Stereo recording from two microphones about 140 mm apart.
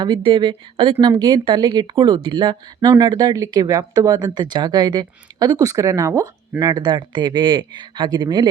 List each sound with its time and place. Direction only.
0.0 s speech: 35° right (ahead or behind)